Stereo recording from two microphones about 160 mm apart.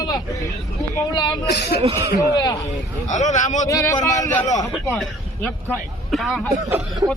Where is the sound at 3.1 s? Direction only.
50° left (ahead or behind).